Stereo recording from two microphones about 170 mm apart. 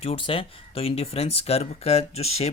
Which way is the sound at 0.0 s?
35° left (ahead or behind).